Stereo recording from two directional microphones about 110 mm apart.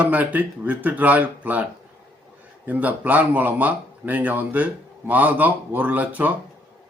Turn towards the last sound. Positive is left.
turn(degrees=-15)  # may be behind; listen again after turning